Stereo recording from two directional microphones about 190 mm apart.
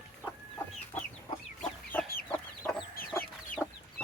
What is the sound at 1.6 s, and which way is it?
Chicken, 5° left (ahead or behind).